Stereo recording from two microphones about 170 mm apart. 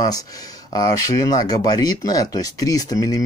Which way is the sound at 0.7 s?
20° left (ahead or behind).